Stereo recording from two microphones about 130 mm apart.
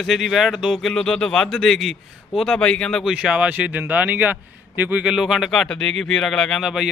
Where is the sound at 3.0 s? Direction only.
5° right (ahead or behind).